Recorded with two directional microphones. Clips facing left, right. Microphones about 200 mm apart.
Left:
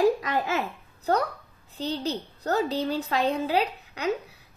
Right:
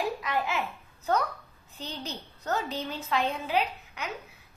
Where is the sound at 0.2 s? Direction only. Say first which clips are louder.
Left 3 dB; 40° left (ahead or behind).